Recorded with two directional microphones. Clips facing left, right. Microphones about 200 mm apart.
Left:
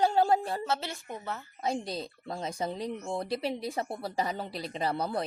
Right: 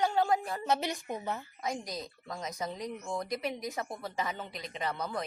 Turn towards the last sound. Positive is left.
turn(degrees=35)  # may be behind; listen again after turning